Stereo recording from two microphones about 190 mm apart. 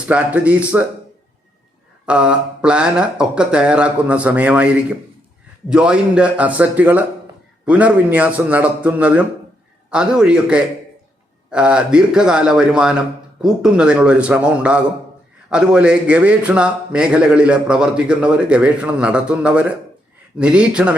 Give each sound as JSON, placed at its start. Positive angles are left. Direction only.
{"t": 0.1, "sound": "a man's voice", "side_deg": -5}
{"t": 2.0, "sound": "a man's voice", "side_deg": -5}